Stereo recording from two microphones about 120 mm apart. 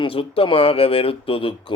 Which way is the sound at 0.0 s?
50° left (ahead or behind).